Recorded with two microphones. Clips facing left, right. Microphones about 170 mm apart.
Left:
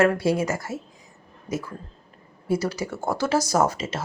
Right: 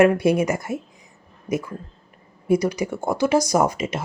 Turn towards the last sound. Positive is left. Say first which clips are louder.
# right 2 dB
turn(degrees=-15)  # may be behind; listen again after turning